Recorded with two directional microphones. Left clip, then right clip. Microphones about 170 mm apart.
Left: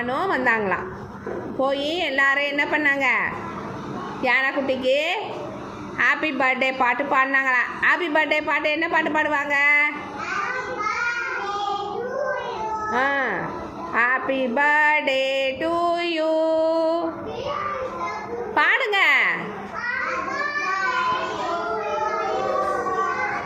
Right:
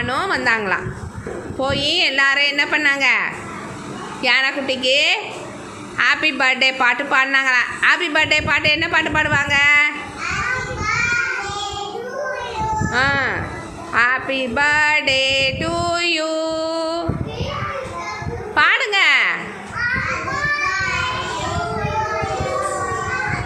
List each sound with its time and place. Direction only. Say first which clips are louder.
0.0 s a woman's voice: right 3 dB; centre (ahead or behind)
12.9 s a woman's voice: right 3 dB; centre (ahead or behind)
18.5 s speech: right 4 dB; centre (ahead or behind)